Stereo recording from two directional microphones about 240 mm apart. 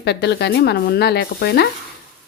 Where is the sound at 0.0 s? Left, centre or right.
Left.